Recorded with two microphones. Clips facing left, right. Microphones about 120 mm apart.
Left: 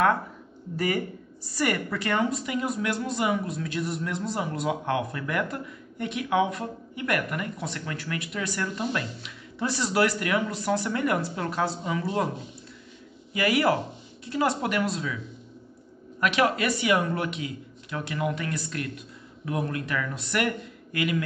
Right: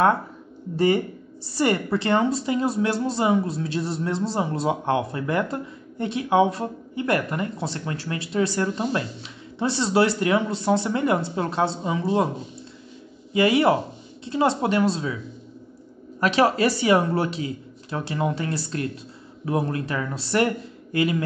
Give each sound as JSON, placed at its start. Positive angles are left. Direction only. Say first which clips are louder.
{"t": 0.7, "sound": "a woman's voice", "louder": "right 7 dB", "side_deg": -30}
{"t": 13.3, "sound": "a woman's voice", "louder": "right 5 dB", "side_deg": -25}
{"t": 16.2, "sound": "speech", "louder": "right 4 dB", "side_deg": -30}